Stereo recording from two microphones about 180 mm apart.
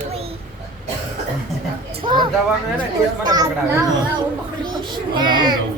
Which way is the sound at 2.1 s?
25° right (ahead or behind).